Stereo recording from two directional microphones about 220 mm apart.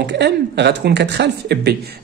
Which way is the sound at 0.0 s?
50° right (ahead or behind).